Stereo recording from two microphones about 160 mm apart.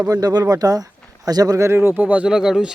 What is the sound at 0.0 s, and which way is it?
A man's voice, 20° right (ahead or behind).